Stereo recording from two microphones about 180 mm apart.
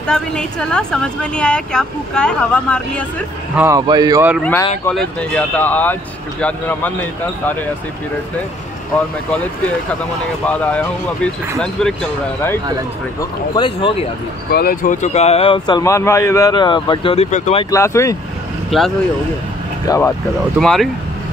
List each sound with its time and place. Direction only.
0.0 s speech: 5° left (ahead or behind)
3.5 s a man's voice: 15° right (ahead or behind)
4.4 s speech: 10° left (ahead or behind)
10.4 s speech: 10° left (ahead or behind)
13.6 s speech: 30° left (ahead or behind)
14.5 s speech: 55° left (ahead or behind); by 17.6 s 35° left (ahead or behind)
17.6 s speech: 15° left (ahead or behind)
18.7 s speech: centre (ahead or behind)
19.9 s speech: 20° left (ahead or behind)
20.5 s speech: centre (ahead or behind)